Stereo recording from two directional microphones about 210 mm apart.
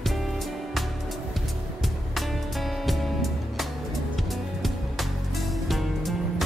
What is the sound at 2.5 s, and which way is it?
Music, centre (ahead or behind).